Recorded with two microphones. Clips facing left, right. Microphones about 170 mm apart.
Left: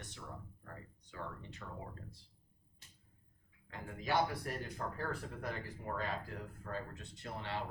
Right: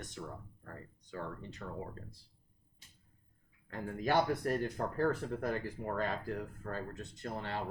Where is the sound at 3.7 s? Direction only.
50° right (ahead or behind).